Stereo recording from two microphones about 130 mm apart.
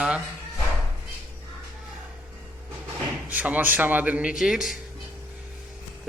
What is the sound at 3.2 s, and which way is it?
Speech, 10° right (ahead or behind).